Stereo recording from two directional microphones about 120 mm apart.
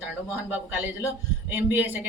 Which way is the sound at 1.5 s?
15° right (ahead or behind).